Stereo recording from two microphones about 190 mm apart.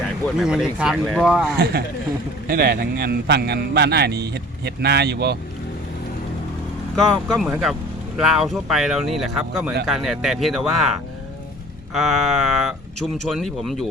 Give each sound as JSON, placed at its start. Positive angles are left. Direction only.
{"t": 0.3, "sound": "speech", "side_deg": -5}
{"t": 1.5, "sound": "a man's voice", "side_deg": -55}
{"t": 6.9, "sound": "speech", "side_deg": 0}
{"t": 11.9, "sound": "speech", "side_deg": 0}